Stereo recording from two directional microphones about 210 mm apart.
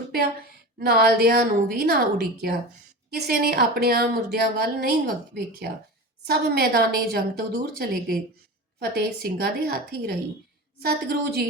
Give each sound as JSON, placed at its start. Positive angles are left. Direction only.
{"t": 0.8, "sound": "a woman's voice", "side_deg": -45}